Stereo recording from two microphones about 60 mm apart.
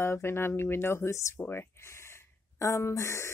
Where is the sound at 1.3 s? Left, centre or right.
Left.